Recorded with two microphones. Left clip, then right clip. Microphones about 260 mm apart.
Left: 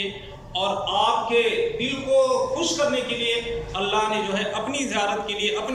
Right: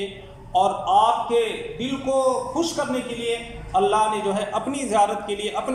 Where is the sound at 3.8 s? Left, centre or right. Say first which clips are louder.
Right 4 dB; centre.